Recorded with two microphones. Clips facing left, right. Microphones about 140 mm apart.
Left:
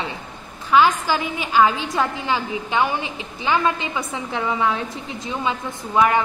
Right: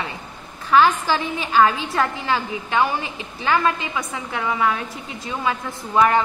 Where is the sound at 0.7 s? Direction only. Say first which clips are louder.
Even; 15° left (ahead or behind).